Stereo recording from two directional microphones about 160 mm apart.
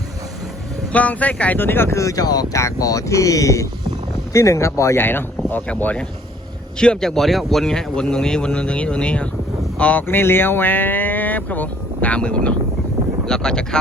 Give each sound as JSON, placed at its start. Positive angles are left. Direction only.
{"t": 0.9, "sound": "speech", "side_deg": 10}